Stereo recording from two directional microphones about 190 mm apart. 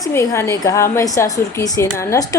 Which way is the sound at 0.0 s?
15° left (ahead or behind).